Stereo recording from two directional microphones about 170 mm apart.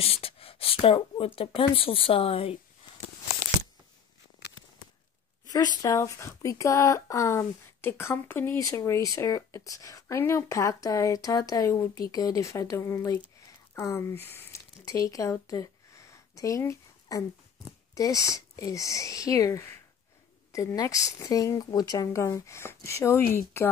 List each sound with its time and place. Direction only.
0.0 s speech: 35° left (ahead or behind)
5.5 s speech: 20° left (ahead or behind)